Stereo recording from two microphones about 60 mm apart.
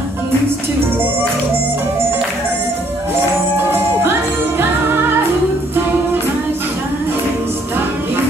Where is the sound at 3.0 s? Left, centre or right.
Right.